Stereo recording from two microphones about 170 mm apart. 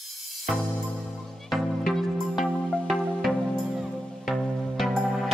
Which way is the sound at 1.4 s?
Centre (ahead or behind).